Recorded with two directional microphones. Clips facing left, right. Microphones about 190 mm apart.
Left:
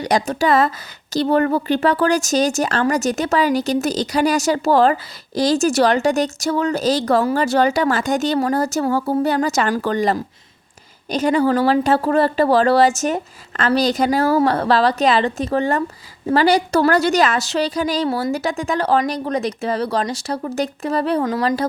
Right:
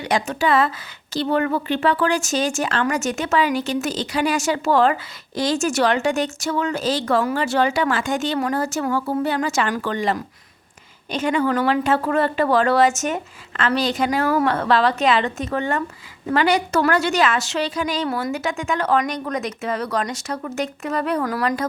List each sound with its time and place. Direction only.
0.0 s speech: 40° left (ahead or behind)